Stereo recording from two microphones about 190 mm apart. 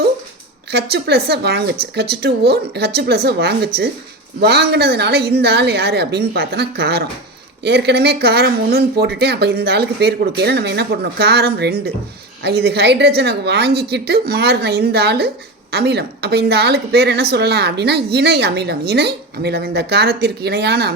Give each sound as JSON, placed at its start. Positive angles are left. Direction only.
{"t": 0.7, "sound": "a woman's voice", "side_deg": -60}